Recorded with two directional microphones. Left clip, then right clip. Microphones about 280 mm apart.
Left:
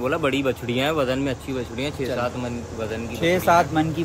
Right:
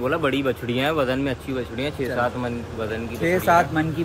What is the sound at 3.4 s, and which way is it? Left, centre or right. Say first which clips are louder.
Speech: even; centre.